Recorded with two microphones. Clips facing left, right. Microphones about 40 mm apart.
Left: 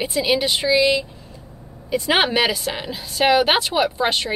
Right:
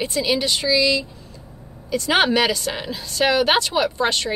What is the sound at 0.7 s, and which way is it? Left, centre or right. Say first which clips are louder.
Speech: left 2 dB; left.